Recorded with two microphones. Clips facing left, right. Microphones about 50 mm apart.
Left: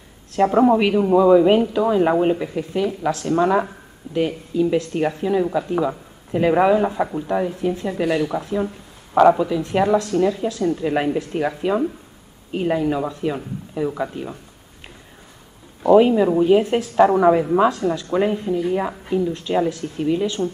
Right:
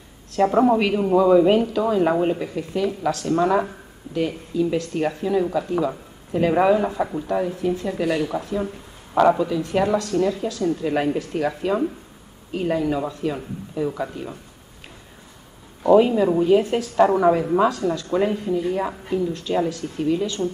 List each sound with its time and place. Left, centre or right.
0.5 s speech: centre
15.8 s speech: centre